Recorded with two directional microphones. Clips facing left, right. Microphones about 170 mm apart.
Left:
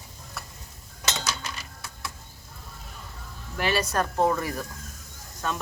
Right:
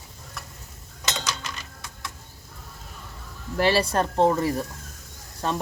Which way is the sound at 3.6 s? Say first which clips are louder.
Right 4 dB; 30° right (ahead or behind).